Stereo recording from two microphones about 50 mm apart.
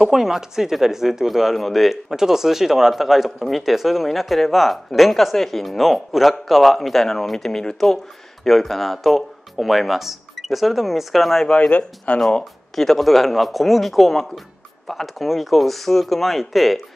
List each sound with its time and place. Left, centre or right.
0.0 s speech: centre
11.4 s speech: left
12.2 s speech: centre